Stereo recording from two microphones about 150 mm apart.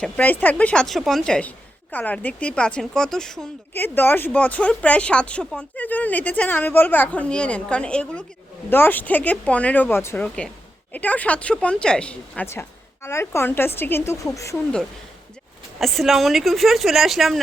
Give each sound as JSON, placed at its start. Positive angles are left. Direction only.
{"t": 0.0, "sound": "speech", "side_deg": 10}
{"t": 3.8, "sound": "speech", "side_deg": 15}
{"t": 12.5, "sound": "a woman's voice", "side_deg": 15}
{"t": 15.8, "sound": "a woman's voice", "side_deg": 0}